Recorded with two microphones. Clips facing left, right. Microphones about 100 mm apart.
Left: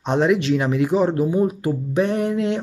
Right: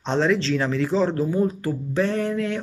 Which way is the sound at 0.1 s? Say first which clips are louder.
Left 3 dB; 15° left (ahead or behind).